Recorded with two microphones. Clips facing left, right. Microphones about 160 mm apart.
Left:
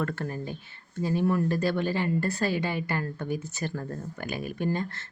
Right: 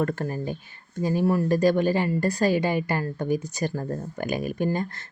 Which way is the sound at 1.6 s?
45° right (ahead or behind).